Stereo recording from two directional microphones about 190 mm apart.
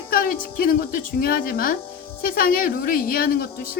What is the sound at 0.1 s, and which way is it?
Music, 50° left (ahead or behind).